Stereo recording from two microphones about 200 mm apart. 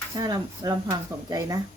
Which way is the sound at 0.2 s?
20° right (ahead or behind).